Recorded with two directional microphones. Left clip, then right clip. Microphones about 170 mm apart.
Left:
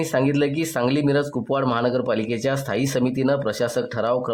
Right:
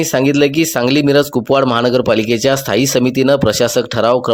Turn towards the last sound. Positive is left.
turn(degrees=-35)  # may be behind; listen again after turning